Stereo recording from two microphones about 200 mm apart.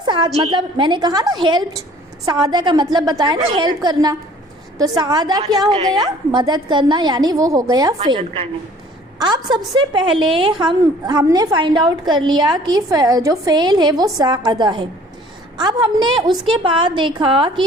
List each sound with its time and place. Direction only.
0.0 s a woman's voice: 20° right (ahead or behind)
5.4 s a woman's voice: 30° right (ahead or behind)
5.9 s a woman's voice: 20° right (ahead or behind)